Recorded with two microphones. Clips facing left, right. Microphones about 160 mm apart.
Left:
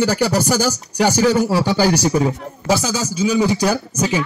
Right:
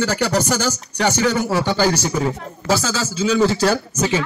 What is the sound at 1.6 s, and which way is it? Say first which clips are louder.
Speech: left 2 dB; 10° left (ahead or behind).